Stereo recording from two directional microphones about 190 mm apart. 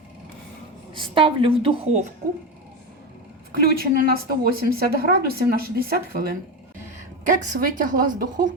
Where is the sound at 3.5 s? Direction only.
55° right (ahead or behind).